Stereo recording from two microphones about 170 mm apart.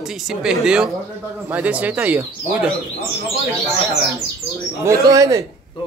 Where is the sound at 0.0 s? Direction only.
5° right (ahead or behind).